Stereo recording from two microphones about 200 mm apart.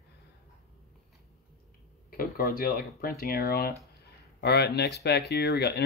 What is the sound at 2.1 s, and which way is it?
Speech, 45° left (ahead or behind).